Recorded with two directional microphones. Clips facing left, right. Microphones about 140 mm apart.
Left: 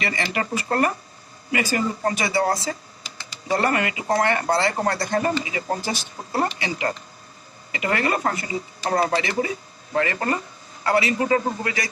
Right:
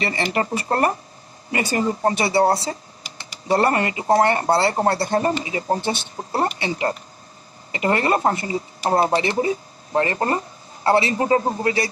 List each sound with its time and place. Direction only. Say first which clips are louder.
0.0 s speech: right 3 dB; 35° right (ahead or behind)